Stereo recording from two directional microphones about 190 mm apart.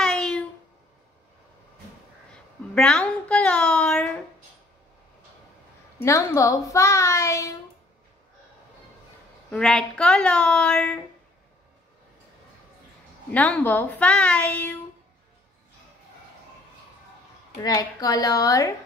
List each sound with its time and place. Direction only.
0.0 s a sound: 5° left (ahead or behind)
2.7 s a woman's voice: 5° left (ahead or behind)
5.9 s speech: 15° left (ahead or behind)
9.5 s a woman's voice: 5° left (ahead or behind)
13.3 s speech: 5° left (ahead or behind)
17.6 s a woman's voice: 20° left (ahead or behind)